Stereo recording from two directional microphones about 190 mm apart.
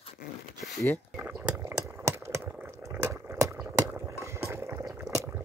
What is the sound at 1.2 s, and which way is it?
Speech, 10° right (ahead or behind).